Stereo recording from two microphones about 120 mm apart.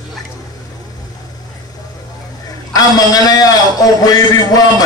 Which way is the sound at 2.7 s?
30° left (ahead or behind).